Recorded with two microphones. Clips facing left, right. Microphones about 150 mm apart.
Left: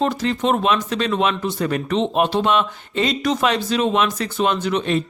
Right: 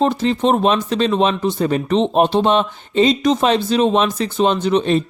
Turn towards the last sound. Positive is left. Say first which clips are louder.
# right 4 dB
turn(degrees=-30)  # may be behind; listen again after turning